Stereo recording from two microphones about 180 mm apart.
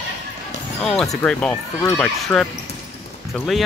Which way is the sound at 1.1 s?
5° left (ahead or behind).